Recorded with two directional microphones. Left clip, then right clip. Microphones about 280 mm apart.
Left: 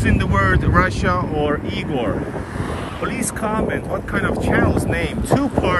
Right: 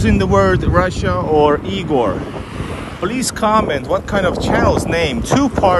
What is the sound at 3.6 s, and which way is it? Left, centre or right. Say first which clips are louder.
Speech: right 5 dB; centre.